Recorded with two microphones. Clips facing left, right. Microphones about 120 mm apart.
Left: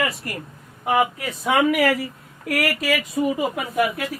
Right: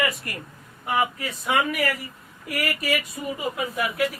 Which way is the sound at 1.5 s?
90° left.